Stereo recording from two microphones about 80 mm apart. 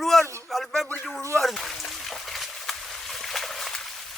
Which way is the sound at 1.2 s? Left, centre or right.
Right.